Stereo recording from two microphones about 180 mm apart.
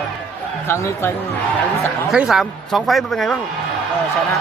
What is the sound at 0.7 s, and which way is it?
Speech, 15° left (ahead or behind).